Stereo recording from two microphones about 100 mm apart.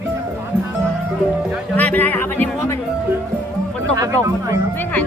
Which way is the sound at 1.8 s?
15° left (ahead or behind).